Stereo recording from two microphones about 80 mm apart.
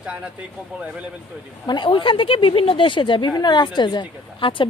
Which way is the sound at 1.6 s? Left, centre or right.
Left.